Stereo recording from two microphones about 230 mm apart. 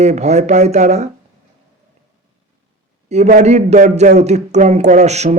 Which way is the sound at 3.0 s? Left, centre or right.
Right.